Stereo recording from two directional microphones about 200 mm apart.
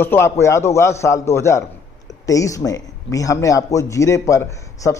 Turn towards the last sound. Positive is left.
turn(degrees=15)  # may be behind; listen again after turning